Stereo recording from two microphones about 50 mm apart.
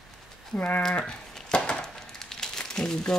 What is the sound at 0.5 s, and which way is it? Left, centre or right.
Speech, left.